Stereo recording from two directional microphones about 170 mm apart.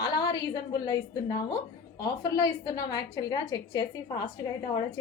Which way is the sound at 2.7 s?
20° left (ahead or behind).